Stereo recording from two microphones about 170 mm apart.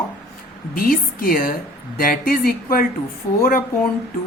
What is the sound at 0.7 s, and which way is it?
A woman's voice, 60° left (ahead or behind).